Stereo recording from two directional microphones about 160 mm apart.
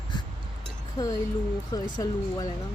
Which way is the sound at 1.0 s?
25° left (ahead or behind).